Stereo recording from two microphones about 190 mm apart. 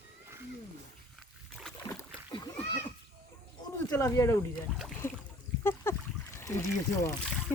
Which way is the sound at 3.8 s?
15° left (ahead or behind).